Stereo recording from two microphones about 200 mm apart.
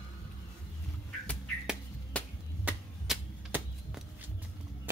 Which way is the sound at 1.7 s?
Centre (ahead or behind).